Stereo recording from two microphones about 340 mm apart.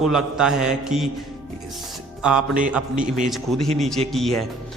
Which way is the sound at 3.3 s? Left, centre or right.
Centre.